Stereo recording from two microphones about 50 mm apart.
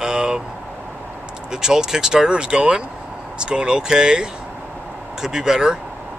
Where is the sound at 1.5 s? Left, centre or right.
Centre.